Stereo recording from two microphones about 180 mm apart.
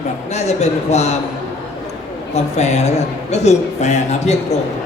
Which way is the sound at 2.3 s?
40° left (ahead or behind).